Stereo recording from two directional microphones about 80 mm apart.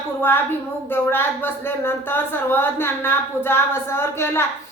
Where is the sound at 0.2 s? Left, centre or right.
Left.